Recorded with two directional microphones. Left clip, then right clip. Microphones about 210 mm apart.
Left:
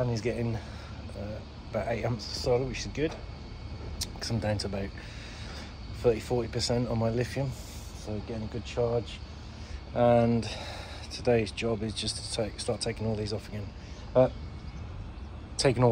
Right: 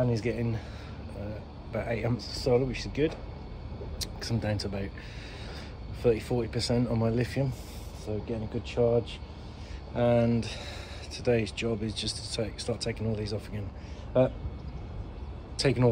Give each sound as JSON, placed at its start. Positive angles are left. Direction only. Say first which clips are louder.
{"t": 0.0, "sound": "speech", "louder": "right 1 dB", "side_deg": -5}
{"t": 1.7, "sound": "speech", "louder": "left 1 dB", "side_deg": -5}
{"t": 6.0, "sound": "speech", "louder": "even", "side_deg": -5}
{"t": 9.9, "sound": "speech", "louder": "left 2 dB", "side_deg": 5}
{"t": 15.6, "sound": "a man's voice", "louder": "left 1 dB", "side_deg": 10}